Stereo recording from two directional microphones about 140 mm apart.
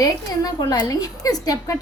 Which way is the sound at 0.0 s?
25° left (ahead or behind).